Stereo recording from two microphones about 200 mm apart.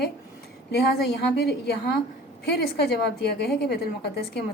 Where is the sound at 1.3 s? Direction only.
55° left (ahead or behind).